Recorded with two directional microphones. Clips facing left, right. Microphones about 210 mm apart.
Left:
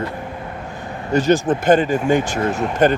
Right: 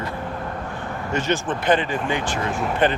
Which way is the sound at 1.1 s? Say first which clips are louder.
Left 8 dB; 35° left (ahead or behind).